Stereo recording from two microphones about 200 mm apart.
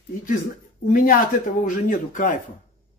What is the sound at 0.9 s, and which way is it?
A man's voice, 50° left (ahead or behind).